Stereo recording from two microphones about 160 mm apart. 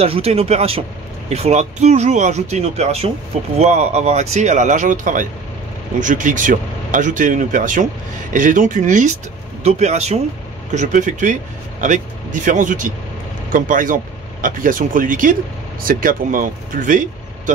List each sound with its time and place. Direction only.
0.0 s speech: 40° right (ahead or behind); by 17.0 s 55° right (ahead or behind)